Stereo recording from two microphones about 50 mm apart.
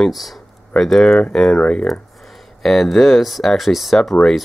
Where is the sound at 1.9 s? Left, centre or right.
Centre.